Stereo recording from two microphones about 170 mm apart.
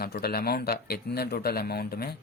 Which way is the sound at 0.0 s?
65° left (ahead or behind).